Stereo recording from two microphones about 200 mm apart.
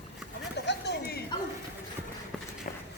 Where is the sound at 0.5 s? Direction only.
60° left (ahead or behind).